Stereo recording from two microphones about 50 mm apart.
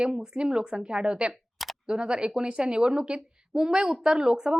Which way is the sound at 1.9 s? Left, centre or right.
Centre.